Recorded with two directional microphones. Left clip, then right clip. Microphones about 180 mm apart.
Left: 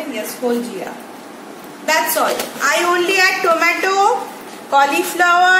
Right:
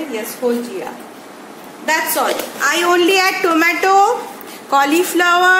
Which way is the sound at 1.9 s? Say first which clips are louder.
Left 1 dB; 40° right (ahead or behind).